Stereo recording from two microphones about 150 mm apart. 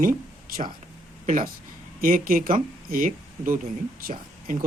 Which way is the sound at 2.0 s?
65° right (ahead or behind).